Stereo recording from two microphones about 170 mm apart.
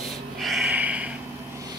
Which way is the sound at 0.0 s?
Centre (ahead or behind).